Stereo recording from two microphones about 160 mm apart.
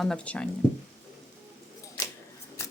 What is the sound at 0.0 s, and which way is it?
Speech, 5° left (ahead or behind).